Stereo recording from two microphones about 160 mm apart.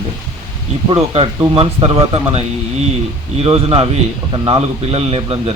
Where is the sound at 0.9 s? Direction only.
35° right (ahead or behind).